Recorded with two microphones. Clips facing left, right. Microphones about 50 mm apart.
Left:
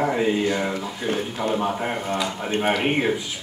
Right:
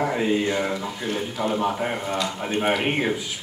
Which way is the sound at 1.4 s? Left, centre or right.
Centre.